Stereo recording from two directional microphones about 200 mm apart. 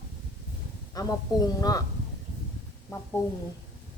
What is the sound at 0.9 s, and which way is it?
Speech, 20° left (ahead or behind).